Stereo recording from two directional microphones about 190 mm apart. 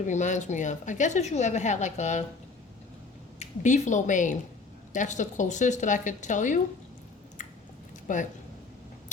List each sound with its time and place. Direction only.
0.0 s a woman's voice: 40° left (ahead or behind)
3.3 s a woman's voice: 40° left (ahead or behind)
8.0 s speech: 40° left (ahead or behind)